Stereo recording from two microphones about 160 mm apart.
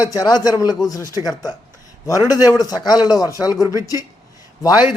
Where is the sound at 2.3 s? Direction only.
20° left (ahead or behind).